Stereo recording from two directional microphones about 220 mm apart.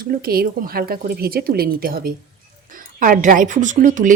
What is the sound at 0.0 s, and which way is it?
A woman's voice, 40° right (ahead or behind).